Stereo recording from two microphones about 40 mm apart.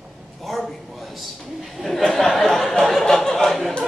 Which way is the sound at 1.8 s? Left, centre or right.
Centre.